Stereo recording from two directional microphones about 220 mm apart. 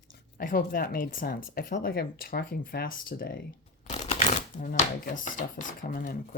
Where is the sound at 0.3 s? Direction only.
40° left (ahead or behind).